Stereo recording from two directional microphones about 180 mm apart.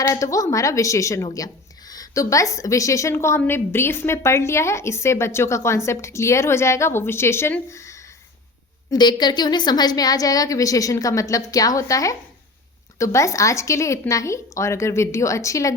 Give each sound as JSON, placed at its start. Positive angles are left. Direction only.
{"t": 0.0, "sound": "a woman's voice", "side_deg": 20}